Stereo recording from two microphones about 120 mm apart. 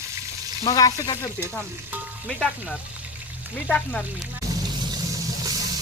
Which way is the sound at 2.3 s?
5° left (ahead or behind).